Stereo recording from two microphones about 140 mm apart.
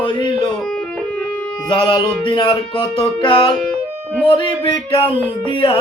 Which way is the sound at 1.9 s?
35° left (ahead or behind).